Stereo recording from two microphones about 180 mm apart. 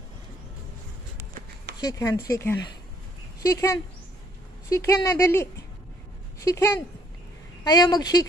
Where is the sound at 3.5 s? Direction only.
20° left (ahead or behind).